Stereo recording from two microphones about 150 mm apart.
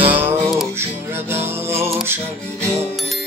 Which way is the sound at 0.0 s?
15° right (ahead or behind).